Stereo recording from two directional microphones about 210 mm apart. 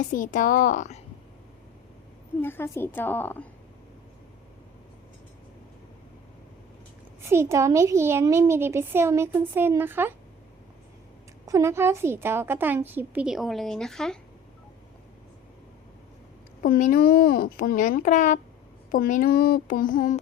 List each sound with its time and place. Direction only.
0.1 s speech: 40° left (ahead or behind)
2.4 s a woman's voice: 10° left (ahead or behind)
7.3 s speech: 10° right (ahead or behind)
11.4 s speech: 15° right (ahead or behind); by 14.2 s centre (ahead or behind)
16.6 s speech: 40° left (ahead or behind)